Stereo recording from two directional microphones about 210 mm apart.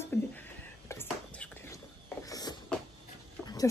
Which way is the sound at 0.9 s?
10° left (ahead or behind).